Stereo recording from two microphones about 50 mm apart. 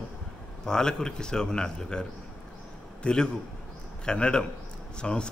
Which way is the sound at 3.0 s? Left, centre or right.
Centre.